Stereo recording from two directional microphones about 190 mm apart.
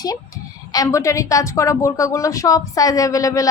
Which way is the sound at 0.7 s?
15° left (ahead or behind).